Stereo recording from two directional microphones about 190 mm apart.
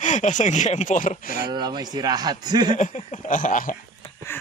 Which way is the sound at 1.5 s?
20° right (ahead or behind).